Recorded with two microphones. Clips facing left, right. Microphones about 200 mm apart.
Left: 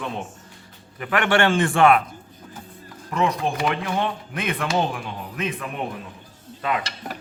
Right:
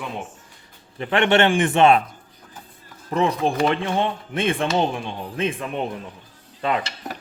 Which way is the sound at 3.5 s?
Centre (ahead or behind).